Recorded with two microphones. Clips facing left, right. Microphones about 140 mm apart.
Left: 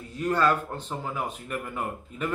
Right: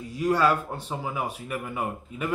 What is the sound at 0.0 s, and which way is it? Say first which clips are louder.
Speech: right 2 dB; 10° right (ahead or behind).